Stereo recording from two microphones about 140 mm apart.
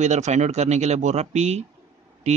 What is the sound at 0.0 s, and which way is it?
A man's voice, 55° right (ahead or behind).